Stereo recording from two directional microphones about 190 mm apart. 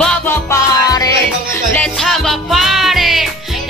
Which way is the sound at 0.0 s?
5° left (ahead or behind).